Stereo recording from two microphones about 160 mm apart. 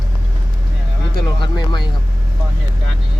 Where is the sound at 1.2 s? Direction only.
25° left (ahead or behind).